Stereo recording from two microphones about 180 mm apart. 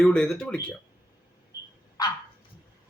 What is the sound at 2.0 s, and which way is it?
Dog, 25° left (ahead or behind).